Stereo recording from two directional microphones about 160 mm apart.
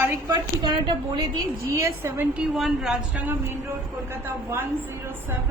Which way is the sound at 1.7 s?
15° right (ahead or behind).